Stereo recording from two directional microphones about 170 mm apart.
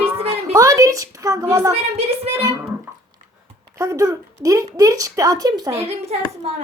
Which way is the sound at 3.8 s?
20° right (ahead or behind).